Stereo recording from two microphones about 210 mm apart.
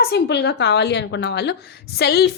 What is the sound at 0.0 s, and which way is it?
A woman's voice, 50° left (ahead or behind).